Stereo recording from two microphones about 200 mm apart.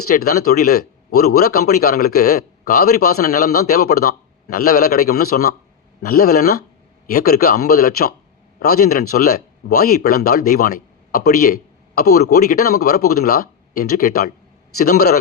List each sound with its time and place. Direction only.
0.3 s speech: 50° left (ahead or behind)